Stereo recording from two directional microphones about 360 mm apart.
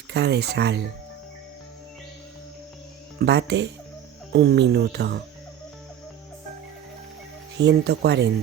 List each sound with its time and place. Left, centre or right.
0.1 s speech: right
3.2 s speech: right
7.6 s speech: right